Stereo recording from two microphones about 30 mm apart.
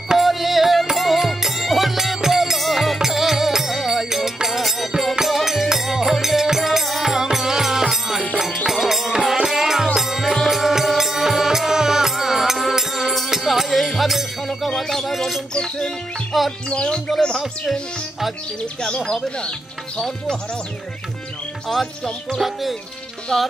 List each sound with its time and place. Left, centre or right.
0.2 s music: centre
2.5 s music: centre
9.1 s music: right
9.5 s music: centre
14.5 s a sound: centre
16.6 s speech: left
22.4 s speech: centre
23.3 s music: centre